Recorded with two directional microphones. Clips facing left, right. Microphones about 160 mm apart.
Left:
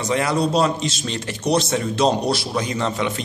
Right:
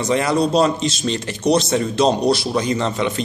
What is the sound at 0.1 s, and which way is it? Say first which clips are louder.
A man's voice: right 2 dB; 5° left (ahead or behind).